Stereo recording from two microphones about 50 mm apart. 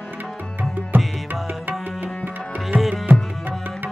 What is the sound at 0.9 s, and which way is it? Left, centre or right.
Music, right.